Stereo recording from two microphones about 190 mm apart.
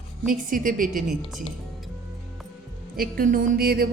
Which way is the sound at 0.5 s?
45° right (ahead or behind).